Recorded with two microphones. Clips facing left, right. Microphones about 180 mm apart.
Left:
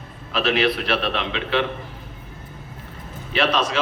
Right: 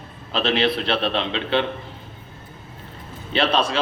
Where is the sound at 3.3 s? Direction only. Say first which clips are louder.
Right 1 dB; 30° right (ahead or behind).